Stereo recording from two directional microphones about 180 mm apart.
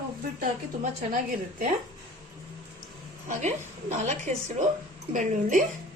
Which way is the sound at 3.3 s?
40° right (ahead or behind).